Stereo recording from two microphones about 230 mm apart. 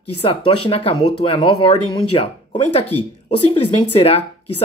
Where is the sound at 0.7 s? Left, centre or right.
Left.